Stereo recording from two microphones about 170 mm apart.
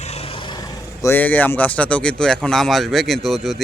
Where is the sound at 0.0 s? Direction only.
40° left (ahead or behind).